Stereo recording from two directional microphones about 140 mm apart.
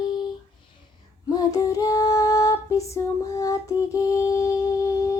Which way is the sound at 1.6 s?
25° left (ahead or behind).